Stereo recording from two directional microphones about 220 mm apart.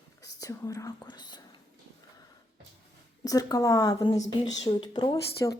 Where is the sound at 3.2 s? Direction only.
15° left (ahead or behind).